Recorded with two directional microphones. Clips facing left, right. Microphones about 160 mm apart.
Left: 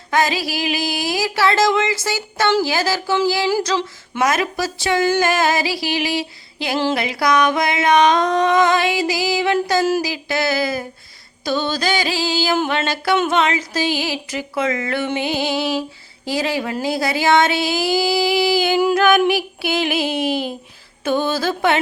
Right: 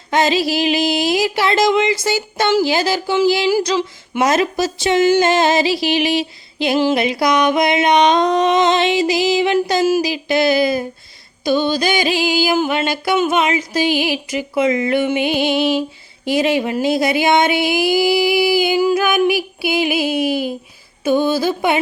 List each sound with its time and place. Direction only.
0.1 s a sound: 25° right (ahead or behind)
2.0 s music: 20° right (ahead or behind)
4.2 s music: 25° right (ahead or behind)